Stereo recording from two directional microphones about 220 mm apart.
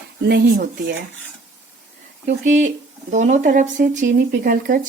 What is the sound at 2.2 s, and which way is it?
Speech, 35° right (ahead or behind).